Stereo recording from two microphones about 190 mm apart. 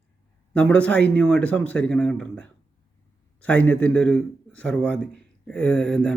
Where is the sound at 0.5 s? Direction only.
5° left (ahead or behind).